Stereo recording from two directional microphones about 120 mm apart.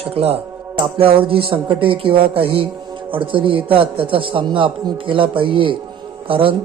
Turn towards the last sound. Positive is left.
turn(degrees=-45)  # may be behind; listen again after turning